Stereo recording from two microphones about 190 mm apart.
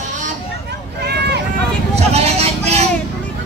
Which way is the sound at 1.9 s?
35° right (ahead or behind).